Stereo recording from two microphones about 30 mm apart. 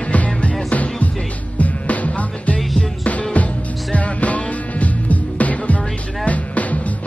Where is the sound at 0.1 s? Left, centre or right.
Left.